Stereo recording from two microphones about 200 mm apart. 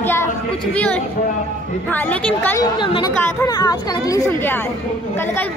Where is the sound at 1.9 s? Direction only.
10° left (ahead or behind).